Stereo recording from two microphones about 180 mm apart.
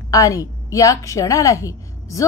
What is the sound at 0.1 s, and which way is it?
A woman's voice, 20° left (ahead or behind).